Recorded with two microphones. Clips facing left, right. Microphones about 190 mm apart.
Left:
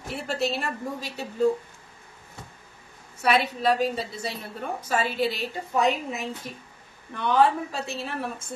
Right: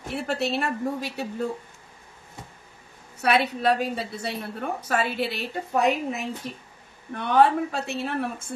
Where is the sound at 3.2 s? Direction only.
60° right (ahead or behind).